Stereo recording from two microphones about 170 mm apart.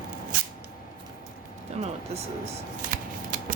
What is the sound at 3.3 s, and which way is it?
Scissors, 50° right (ahead or behind).